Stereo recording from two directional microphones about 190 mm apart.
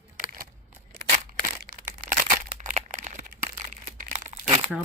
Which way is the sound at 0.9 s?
45° right (ahead or behind).